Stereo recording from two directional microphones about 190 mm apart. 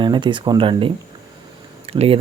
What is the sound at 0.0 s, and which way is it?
Speech, 25° right (ahead or behind).